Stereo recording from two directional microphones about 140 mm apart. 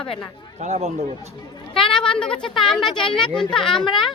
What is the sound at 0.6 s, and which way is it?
Speech, 50° right (ahead or behind).